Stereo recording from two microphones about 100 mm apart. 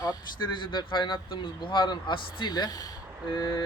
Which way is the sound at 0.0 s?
45° left (ahead or behind).